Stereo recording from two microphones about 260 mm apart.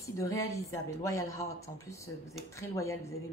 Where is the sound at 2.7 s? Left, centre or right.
Centre.